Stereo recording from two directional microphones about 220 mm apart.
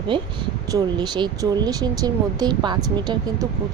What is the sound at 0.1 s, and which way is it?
A woman's voice, 20° right (ahead or behind).